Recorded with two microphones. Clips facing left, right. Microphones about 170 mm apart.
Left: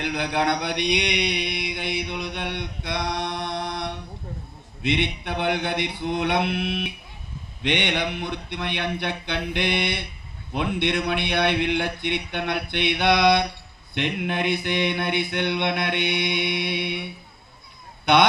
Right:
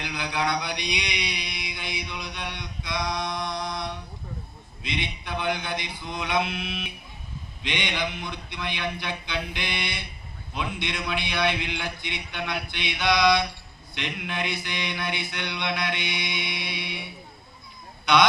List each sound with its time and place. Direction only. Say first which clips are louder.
0.0 s a sound: left 5 dB; 60° left (ahead or behind)
4.8 s mantra: left 8 dB; 65° left (ahead or behind)
18.0 s speech: left 3 dB; 55° left (ahead or behind)